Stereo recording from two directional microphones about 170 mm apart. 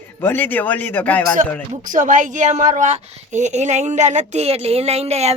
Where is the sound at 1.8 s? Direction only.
50° right (ahead or behind).